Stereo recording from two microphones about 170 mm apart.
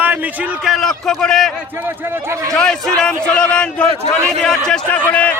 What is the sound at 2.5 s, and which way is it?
A man's voice, 5° left (ahead or behind).